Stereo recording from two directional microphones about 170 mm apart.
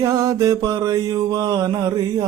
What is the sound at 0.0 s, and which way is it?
Mantra, 20° right (ahead or behind).